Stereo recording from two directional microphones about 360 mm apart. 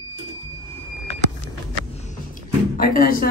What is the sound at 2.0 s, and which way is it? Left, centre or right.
Music, left.